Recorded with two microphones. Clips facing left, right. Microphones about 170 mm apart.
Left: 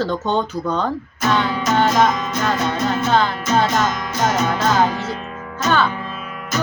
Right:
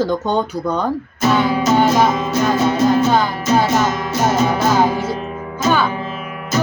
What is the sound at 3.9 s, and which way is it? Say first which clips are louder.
Music: right 5 dB; 25° right (ahead or behind).